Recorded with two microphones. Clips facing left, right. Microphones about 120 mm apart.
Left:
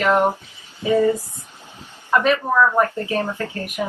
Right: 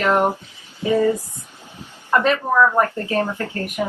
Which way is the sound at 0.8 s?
15° left (ahead or behind).